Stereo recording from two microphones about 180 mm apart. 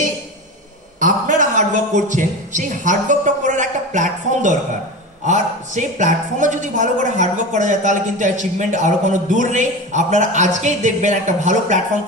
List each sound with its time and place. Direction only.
0.9 s a man's voice: 45° right (ahead or behind)